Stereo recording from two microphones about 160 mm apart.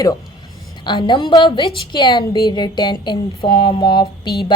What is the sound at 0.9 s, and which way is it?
Female singing, 30° left (ahead or behind).